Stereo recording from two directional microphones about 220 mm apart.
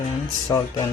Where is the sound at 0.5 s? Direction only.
15° left (ahead or behind).